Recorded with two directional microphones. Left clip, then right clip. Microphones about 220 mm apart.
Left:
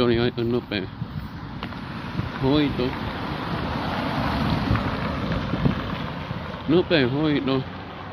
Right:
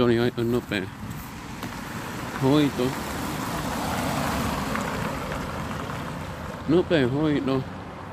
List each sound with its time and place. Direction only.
0.0 s speech: 5° right (ahead or behind)
2.4 s speech: 45° right (ahead or behind)
2.8 s vehicle: 55° right (ahead or behind); by 5.9 s 20° right (ahead or behind)
6.7 s speech: centre (ahead or behind)